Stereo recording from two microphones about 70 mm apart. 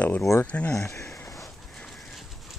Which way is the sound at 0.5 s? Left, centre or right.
Centre.